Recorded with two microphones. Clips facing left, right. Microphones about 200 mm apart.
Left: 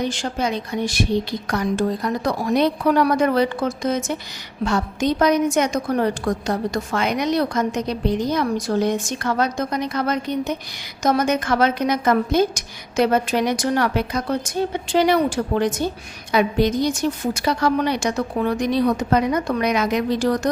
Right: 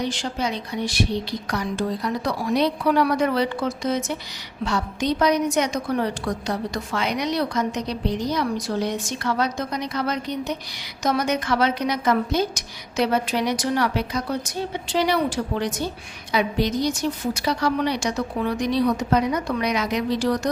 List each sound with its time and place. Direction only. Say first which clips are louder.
0.0 s a woman's voice: left 3 dB; 50° left (ahead or behind)